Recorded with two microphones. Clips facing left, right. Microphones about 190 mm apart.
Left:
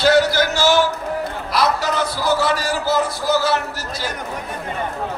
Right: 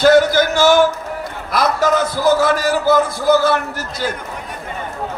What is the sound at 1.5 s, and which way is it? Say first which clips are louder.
A man's voice: right 4 dB; 50° right (ahead or behind).